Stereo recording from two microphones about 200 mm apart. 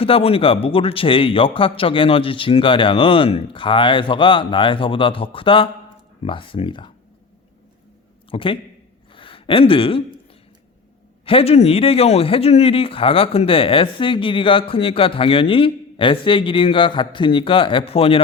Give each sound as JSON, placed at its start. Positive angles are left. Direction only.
{"t": 0.0, "sound": "speech", "side_deg": 30}
{"t": 8.3, "sound": "a man's voice", "side_deg": 25}
{"t": 9.1, "sound": "a sound", "side_deg": 25}
{"t": 11.3, "sound": "speech", "side_deg": 30}